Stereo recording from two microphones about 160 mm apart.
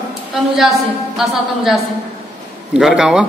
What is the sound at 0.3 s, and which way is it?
A woman's voice, centre (ahead or behind).